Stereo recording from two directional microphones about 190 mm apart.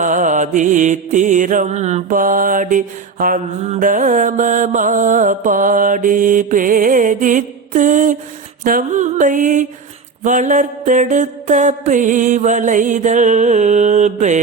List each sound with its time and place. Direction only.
0.0 s mantra: 40° right (ahead or behind)